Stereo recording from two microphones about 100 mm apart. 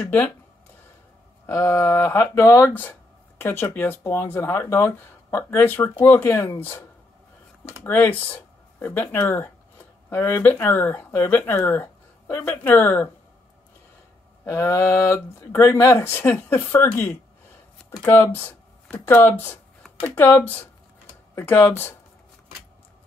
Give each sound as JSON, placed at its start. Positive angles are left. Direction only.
{"t": 1.4, "sound": "speech", "side_deg": 30}
{"t": 7.8, "sound": "speech", "side_deg": 20}
{"t": 14.4, "sound": "speech", "side_deg": 30}